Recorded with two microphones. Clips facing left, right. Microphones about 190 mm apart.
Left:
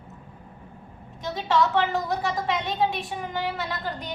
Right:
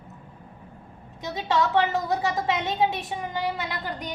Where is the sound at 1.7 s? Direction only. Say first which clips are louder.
Right 1 dB; 20° right (ahead or behind).